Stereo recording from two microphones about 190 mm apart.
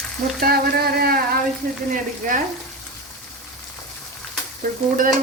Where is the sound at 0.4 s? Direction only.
55° right (ahead or behind).